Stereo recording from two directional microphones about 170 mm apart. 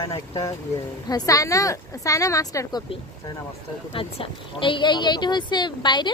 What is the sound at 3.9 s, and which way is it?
Speech, 30° left (ahead or behind).